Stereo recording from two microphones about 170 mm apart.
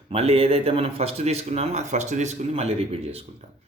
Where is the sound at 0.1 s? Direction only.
35° right (ahead or behind).